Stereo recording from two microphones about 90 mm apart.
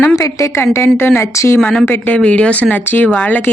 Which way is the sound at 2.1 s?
15° left (ahead or behind).